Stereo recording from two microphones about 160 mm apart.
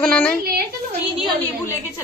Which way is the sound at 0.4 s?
70° right (ahead or behind).